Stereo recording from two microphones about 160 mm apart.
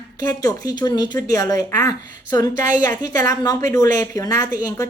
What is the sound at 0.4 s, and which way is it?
A woman's voice, 20° left (ahead or behind).